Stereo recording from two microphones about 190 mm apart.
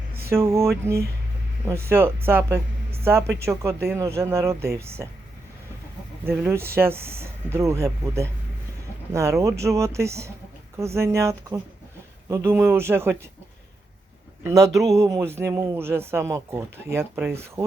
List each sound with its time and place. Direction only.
0.2 s mantra: 15° right (ahead or behind)
1.6 s a woman's voice: 15° right (ahead or behind)
6.2 s speech: 10° right (ahead or behind)
14.4 s speech: 15° right (ahead or behind)